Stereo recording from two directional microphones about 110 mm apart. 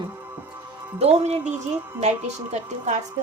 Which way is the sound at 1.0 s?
70° right (ahead or behind).